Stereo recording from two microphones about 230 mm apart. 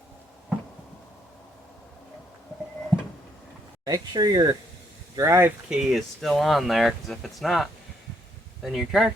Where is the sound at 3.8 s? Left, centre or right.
Centre.